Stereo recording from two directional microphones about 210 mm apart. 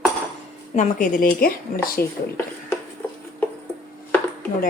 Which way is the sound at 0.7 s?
40° left (ahead or behind).